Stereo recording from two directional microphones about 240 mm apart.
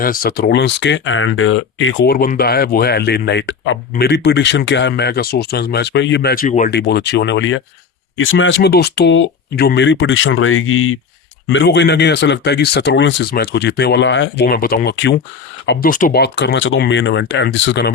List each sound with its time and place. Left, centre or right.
0.0 s speech: left
2.1 s speech: left
11.4 s speech: left
15.9 s speech: left